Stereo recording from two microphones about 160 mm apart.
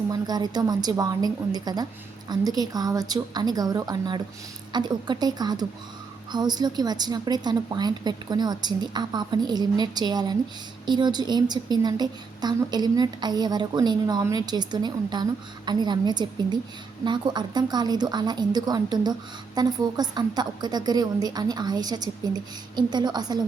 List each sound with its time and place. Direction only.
0.1 s a woman's voice: 25° right (ahead or behind)